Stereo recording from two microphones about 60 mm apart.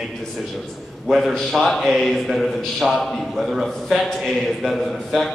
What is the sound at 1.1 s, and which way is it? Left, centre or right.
A man's voice, centre.